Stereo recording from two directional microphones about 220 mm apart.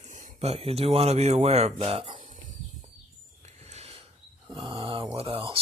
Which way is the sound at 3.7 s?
25° right (ahead or behind).